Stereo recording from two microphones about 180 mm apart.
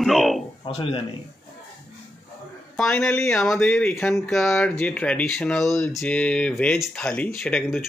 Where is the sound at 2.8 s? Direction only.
5° left (ahead or behind).